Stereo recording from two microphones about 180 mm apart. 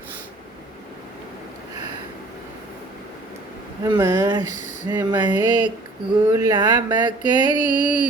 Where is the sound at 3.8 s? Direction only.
20° right (ahead or behind).